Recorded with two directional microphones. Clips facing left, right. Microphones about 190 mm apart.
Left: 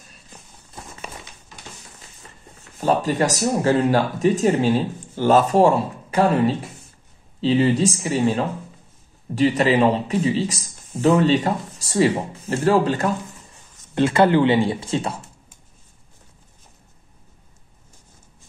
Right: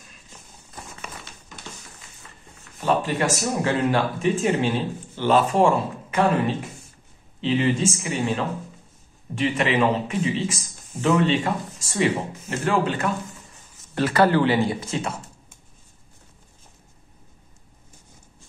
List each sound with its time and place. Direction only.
2.8 s a man's voice: 40° left (ahead or behind)
13.9 s speech: 25° left (ahead or behind)